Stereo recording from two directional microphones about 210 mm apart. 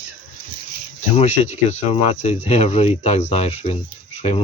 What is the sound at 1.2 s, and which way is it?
Speech, 30° left (ahead or behind).